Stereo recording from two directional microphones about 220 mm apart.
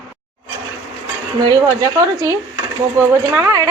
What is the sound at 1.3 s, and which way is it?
A woman's voice, 20° right (ahead or behind).